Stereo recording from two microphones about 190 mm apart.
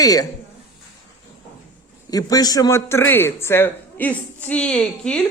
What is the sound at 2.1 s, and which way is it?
A man's voice, 20° left (ahead or behind).